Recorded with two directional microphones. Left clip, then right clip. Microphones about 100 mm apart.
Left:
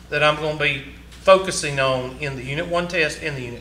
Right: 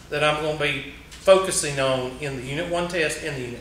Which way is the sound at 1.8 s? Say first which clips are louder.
Left 3 dB; 35° left (ahead or behind).